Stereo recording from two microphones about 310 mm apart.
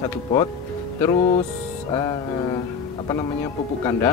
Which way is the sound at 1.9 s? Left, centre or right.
Centre.